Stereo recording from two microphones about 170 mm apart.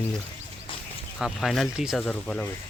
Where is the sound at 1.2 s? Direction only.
Centre (ahead or behind).